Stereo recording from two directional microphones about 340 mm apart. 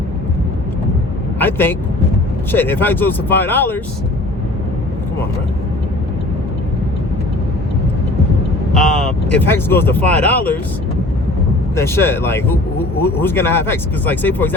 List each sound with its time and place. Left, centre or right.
1.4 s speech: centre
8.7 s speech: centre
11.8 s speech: centre